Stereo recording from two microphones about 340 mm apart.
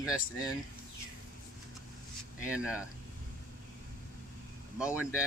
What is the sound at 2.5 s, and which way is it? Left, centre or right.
Speech, centre.